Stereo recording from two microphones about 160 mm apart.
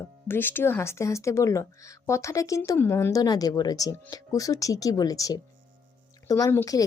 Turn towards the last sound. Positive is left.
turn(degrees=20)  # may be behind; listen again after turning